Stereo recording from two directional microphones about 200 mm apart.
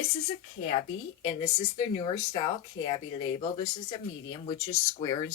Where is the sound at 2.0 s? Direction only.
20° left (ahead or behind).